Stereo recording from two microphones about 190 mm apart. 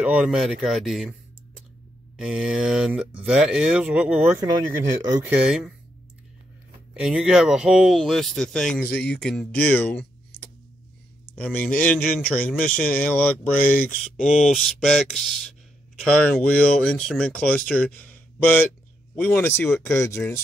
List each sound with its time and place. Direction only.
0.0 s speech: 5° right (ahead or behind)
2.1 s speech: 5° right (ahead or behind)
5.0 s speech: 20° right (ahead or behind)
5.3 s speech: 5° right (ahead or behind)
6.9 s speech: 5° right (ahead or behind)
11.3 s speech: 10° left (ahead or behind)